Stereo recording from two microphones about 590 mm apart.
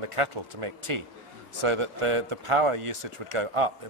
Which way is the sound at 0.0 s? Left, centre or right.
Right.